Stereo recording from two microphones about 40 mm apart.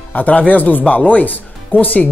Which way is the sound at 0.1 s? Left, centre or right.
Left.